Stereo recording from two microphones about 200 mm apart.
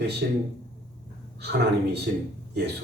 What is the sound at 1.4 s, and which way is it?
Speech, 55° right (ahead or behind).